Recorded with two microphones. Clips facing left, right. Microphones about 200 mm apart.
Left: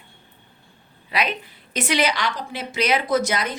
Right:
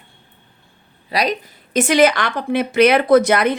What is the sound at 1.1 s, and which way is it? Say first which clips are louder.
A woman's voice: right 5 dB; 40° right (ahead or behind).